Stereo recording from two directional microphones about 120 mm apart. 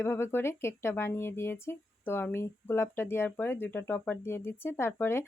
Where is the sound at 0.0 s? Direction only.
20° left (ahead or behind).